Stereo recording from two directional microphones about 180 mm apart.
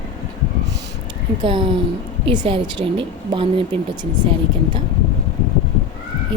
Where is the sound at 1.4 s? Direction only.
30° right (ahead or behind).